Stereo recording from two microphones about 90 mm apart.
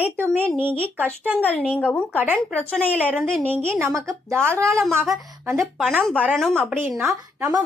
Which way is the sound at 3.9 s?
30° right (ahead or behind).